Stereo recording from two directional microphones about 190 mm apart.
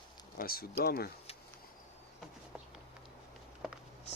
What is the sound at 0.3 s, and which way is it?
Speech, 50° left (ahead or behind).